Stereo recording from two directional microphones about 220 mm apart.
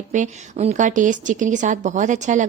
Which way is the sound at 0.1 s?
35° right (ahead or behind).